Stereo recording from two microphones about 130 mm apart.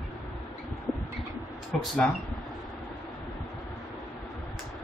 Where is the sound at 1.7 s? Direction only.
10° left (ahead or behind).